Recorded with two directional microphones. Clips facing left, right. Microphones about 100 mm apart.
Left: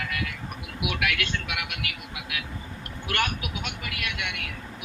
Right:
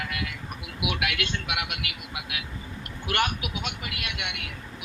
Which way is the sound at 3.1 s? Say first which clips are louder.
Right 2 dB; 20° right (ahead or behind).